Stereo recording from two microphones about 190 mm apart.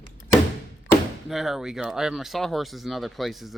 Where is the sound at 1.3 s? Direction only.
Centre (ahead or behind).